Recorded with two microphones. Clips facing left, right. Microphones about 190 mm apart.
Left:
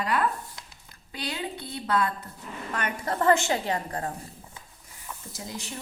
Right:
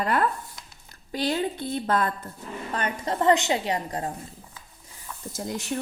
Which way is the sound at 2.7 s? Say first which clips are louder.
Right 2 dB; 25° right (ahead or behind).